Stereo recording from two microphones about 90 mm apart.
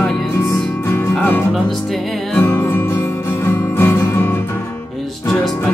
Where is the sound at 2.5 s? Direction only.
25° left (ahead or behind).